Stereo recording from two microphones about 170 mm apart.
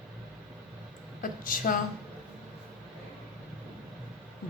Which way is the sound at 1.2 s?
55° left (ahead or behind).